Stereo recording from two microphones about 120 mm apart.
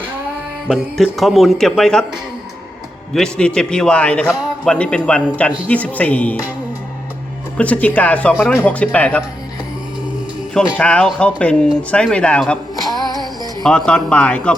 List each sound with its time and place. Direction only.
0.7 s speech: centre (ahead or behind)
3.1 s a man's voice: 5° left (ahead or behind)
7.5 s a man's voice: 10° left (ahead or behind)
10.5 s a man's voice: 10° left (ahead or behind)
13.1 s music: 35° right (ahead or behind)
13.6 s a man's voice: 5° left (ahead or behind)